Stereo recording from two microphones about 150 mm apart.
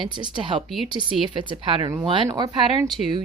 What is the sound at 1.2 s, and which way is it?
Speech, 30° right (ahead or behind).